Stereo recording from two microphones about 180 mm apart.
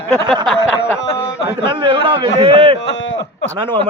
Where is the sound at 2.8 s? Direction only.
85° left.